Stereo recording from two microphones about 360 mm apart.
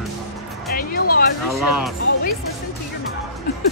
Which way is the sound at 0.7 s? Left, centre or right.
Left.